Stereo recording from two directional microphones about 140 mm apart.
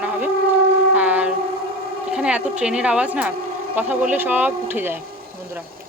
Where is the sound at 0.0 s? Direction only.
10° right (ahead or behind).